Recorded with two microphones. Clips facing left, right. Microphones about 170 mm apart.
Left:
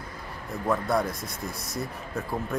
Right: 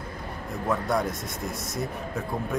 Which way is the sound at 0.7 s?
Centre (ahead or behind).